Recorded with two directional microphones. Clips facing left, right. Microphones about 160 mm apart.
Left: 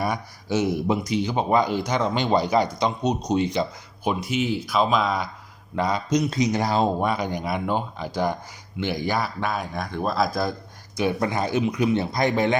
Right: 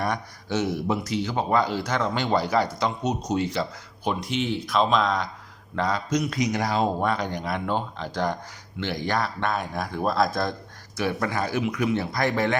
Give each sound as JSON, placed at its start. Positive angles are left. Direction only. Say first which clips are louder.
{"t": 0.0, "sound": "speech", "louder": "left 1 dB", "side_deg": 10}
{"t": 7.0, "sound": "a man's voice", "louder": "left 1 dB", "side_deg": 10}
{"t": 10.9, "sound": "speech", "louder": "left 3 dB", "side_deg": 20}